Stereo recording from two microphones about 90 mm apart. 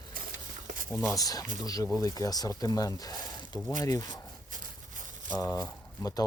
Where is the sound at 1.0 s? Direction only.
40° left (ahead or behind).